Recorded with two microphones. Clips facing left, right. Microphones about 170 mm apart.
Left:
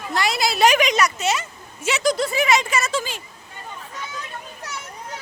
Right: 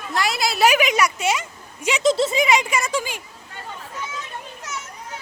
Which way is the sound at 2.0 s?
25° right (ahead or behind).